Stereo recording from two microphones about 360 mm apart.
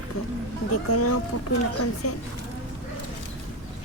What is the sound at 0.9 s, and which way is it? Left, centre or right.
Speech, left.